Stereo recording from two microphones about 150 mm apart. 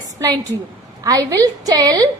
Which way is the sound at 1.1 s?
25° right (ahead or behind).